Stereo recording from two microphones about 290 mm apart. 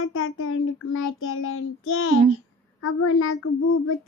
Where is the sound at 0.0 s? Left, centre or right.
Left.